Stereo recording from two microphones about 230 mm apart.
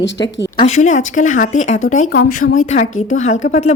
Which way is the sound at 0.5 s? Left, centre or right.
Left.